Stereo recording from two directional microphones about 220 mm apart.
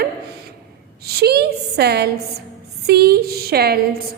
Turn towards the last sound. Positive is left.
turn(degrees=-45)  # may be behind; listen again after turning